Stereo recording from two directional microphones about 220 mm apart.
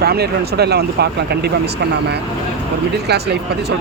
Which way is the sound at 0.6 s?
50° right (ahead or behind).